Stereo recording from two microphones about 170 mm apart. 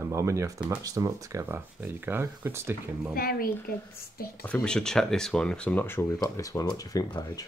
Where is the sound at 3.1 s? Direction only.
60° left (ahead or behind).